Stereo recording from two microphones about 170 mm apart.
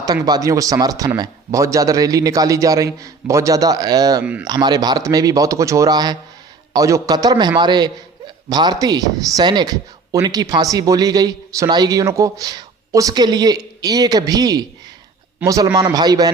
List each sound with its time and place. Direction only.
0.0 s speech: 25° right (ahead or behind)
4.2 s a man's voice: 10° right (ahead or behind)
4.4 s speech: 25° right (ahead or behind)